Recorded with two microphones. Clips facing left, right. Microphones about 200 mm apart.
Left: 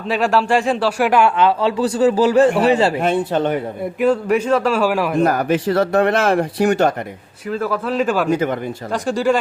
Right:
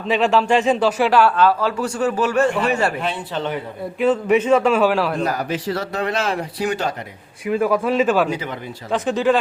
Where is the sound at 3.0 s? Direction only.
50° left (ahead or behind).